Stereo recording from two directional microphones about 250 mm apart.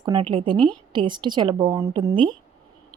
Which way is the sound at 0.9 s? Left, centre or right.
Centre.